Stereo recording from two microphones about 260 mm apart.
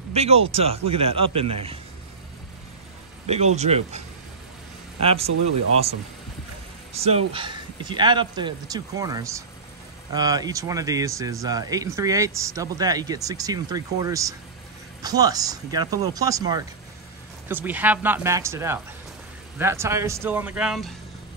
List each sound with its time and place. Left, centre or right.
0.1 s speech: right
3.3 s speech: right
7.0 s speech: right; by 20.9 s centre